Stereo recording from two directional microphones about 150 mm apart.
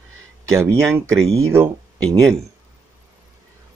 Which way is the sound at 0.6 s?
15° right (ahead or behind).